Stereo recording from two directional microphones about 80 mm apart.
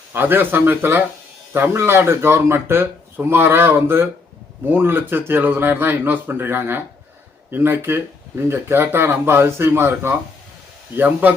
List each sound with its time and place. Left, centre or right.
0.1 s speech: right